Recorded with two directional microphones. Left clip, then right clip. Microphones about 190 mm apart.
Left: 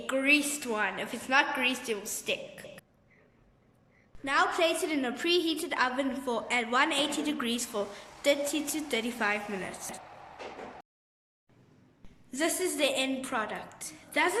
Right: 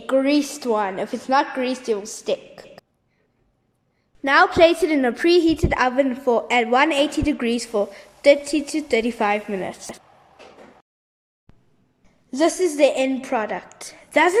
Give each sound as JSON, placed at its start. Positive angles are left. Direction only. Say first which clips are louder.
{"t": 0.0, "sound": "a woman's voice", "louder": "right 7 dB", "side_deg": -25}
{"t": 4.2, "sound": "a woman's voice", "louder": "right 12 dB", "side_deg": -45}
{"t": 12.3, "sound": "a woman's voice", "louder": "right 11 dB", "side_deg": -30}